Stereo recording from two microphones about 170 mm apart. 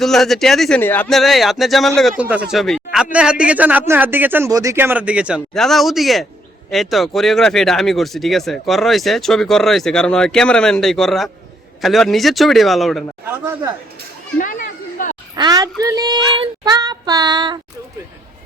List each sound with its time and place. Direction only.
0.0 s speech: centre (ahead or behind)
13.2 s speech: 15° right (ahead or behind)
14.3 s a sound: 55° left (ahead or behind)
15.4 s child singing: 20° right (ahead or behind)